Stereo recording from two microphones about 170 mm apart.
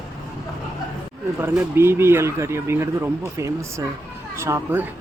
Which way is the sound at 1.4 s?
15° right (ahead or behind).